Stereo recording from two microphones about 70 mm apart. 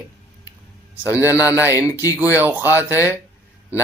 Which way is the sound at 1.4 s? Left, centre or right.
Right.